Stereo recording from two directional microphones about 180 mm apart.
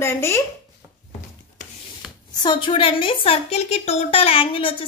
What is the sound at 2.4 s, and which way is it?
A woman's voice, 25° left (ahead or behind).